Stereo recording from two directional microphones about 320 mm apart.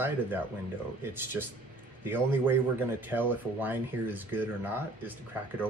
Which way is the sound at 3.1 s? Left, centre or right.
Centre.